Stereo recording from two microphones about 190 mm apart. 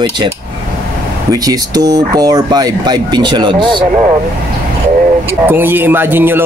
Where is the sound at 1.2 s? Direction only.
20° right (ahead or behind).